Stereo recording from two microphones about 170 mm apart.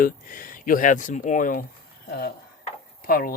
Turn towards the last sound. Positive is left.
turn(degrees=60)  # may be behind; listen again after turning